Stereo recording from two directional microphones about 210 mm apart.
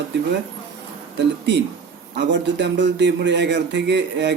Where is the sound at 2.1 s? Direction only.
55° right (ahead or behind).